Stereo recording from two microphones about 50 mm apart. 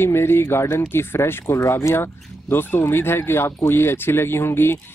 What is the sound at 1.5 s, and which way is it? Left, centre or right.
Speech, left.